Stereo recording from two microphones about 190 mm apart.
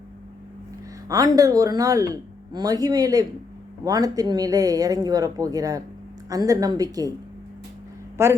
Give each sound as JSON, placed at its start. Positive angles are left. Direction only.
{"t": 1.0, "sound": "speech", "side_deg": -20}
{"t": 8.2, "sound": "a woman's voice", "side_deg": -15}